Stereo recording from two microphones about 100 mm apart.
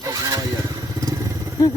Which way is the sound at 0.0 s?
35° right (ahead or behind).